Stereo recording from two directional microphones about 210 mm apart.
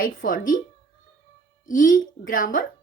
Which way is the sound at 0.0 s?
40° left (ahead or behind).